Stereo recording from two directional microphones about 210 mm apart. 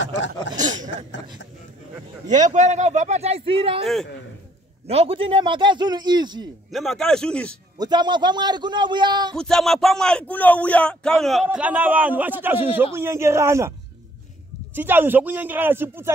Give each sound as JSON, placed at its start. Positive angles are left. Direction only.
{"t": 0.6, "sound": "a man's voice", "side_deg": -35}
{"t": 2.2, "sound": "a man's voice", "side_deg": -35}
{"t": 3.8, "sound": "speech", "side_deg": 0}
{"t": 4.8, "sound": "a man's voice", "side_deg": -30}
{"t": 6.7, "sound": "speech", "side_deg": 0}
{"t": 7.8, "sound": "a man's voice", "side_deg": -20}
{"t": 9.3, "sound": "speech", "side_deg": 5}
{"t": 14.8, "sound": "speech", "side_deg": -10}